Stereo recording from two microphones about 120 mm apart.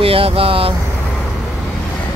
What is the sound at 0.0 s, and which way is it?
Vehicle, 50° right (ahead or behind).